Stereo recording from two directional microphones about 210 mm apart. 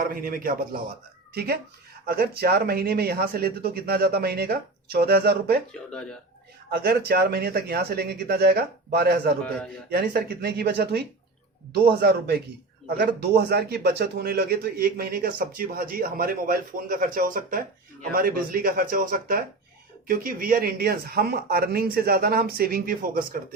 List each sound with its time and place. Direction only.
0.0 s speech: 45° right (ahead or behind)
5.7 s speech: 5° left (ahead or behind)
6.7 s speech: 50° right (ahead or behind)